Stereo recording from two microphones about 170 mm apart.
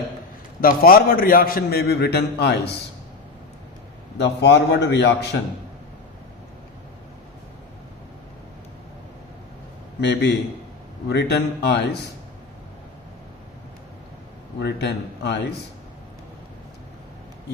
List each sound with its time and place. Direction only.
0.6 s a man's voice: 60° left (ahead or behind); by 2.7 s 75° left (ahead or behind)
4.2 s a man's voice: 85° left
10.0 s a man's voice: 90° left
14.6 s a man's voice: 80° left